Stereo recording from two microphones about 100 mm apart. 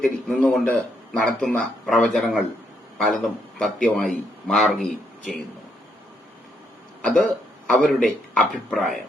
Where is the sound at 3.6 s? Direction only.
10° left (ahead or behind).